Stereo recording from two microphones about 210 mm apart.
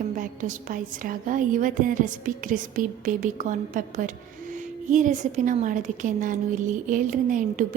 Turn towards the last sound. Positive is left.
turn(degrees=-35)  # may be behind; listen again after turning